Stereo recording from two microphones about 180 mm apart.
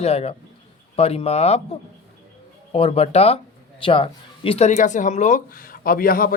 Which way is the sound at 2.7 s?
30° left (ahead or behind).